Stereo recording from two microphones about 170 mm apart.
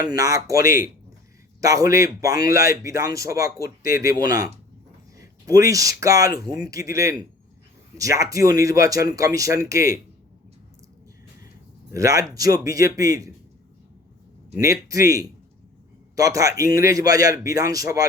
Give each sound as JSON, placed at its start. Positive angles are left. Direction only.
{"t": 0.0, "sound": "speech", "side_deg": -20}
{"t": 11.9, "sound": "speech", "side_deg": -20}
{"t": 14.6, "sound": "speech", "side_deg": -20}